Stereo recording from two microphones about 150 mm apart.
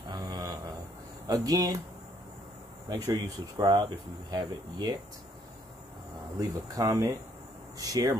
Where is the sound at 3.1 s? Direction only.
25° right (ahead or behind).